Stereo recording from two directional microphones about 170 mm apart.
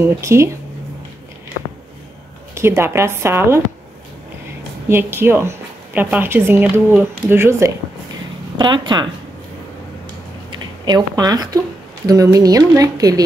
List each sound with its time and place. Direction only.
0.0 s a woman's voice: 15° right (ahead or behind)
2.5 s a woman's voice: 15° right (ahead or behind)
4.8 s a woman's voice: 15° right (ahead or behind)
8.5 s a woman's voice: 25° right (ahead or behind)
10.5 s a woman's voice: 25° right (ahead or behind)